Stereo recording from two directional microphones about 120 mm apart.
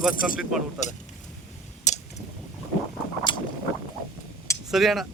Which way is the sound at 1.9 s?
80° left.